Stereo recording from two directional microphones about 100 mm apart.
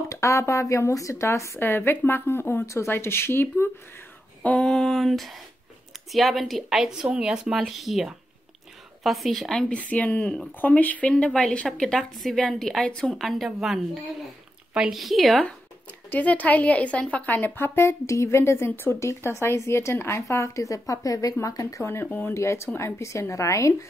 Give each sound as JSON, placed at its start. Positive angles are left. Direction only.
{"t": 0.1, "sound": "a woman's voice", "side_deg": 30}
{"t": 4.4, "sound": "a sound", "side_deg": 10}
{"t": 6.1, "sound": "a woman's voice", "side_deg": 0}
{"t": 16.1, "sound": "a woman's voice", "side_deg": 15}